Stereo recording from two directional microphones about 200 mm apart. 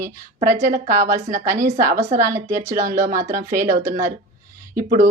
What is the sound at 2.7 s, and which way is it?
Speech, 40° right (ahead or behind).